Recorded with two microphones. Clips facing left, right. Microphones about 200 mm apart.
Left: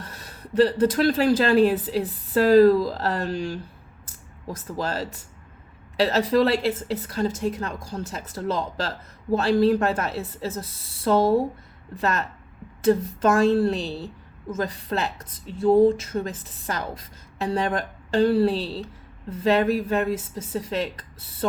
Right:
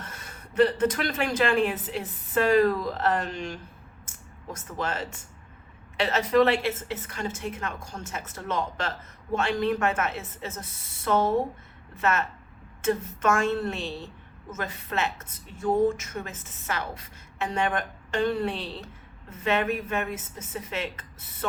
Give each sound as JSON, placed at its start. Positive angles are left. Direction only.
{"t": 0.0, "sound": "a woman's voice", "side_deg": 35}